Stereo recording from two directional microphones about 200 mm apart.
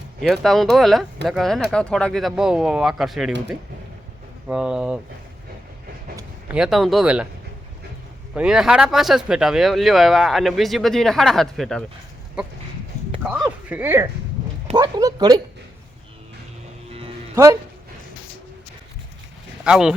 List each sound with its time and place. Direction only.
0.2 s speech: centre (ahead or behind)
4.4 s speech: 5° right (ahead or behind)
6.1 s speech: 5° right (ahead or behind)
8.4 s speech: 5° right (ahead or behind); by 15.4 s 20° right (ahead or behind)
17.3 s speech: 15° right (ahead or behind)
19.6 s speech: 5° right (ahead or behind)